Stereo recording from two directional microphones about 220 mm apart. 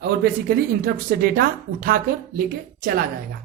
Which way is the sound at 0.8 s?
40° right (ahead or behind).